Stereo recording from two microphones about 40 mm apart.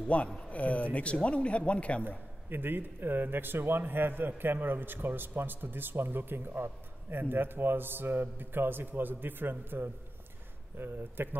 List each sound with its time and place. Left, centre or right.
0.4 s speech: left
2.0 s a man's voice: right